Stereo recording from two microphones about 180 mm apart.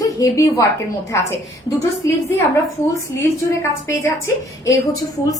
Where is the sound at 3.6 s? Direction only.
15° left (ahead or behind).